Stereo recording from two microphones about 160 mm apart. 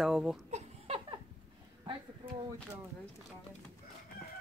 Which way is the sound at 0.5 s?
35° right (ahead or behind).